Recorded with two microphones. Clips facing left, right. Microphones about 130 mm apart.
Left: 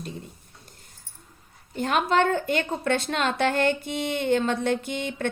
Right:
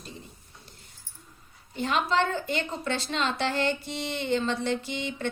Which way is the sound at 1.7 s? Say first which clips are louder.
Left 3 dB; 50° left (ahead or behind).